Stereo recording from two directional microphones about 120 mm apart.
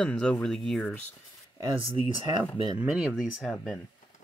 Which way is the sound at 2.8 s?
15° right (ahead or behind).